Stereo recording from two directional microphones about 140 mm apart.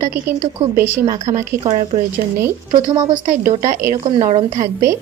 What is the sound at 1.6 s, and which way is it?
Speech, 50° right (ahead or behind).